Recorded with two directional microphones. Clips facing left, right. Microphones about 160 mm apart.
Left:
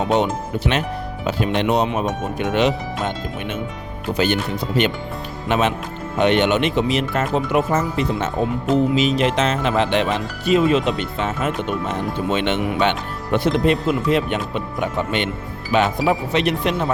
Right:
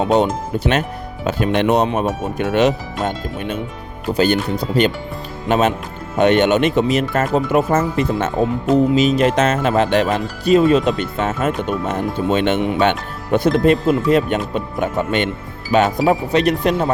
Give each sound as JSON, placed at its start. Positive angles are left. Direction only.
{"t": 0.1, "sound": "speech", "side_deg": -40}